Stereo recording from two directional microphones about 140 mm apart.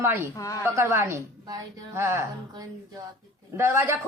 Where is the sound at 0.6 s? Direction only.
20° right (ahead or behind).